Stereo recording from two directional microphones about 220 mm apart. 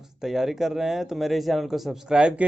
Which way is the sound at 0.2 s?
Centre (ahead or behind).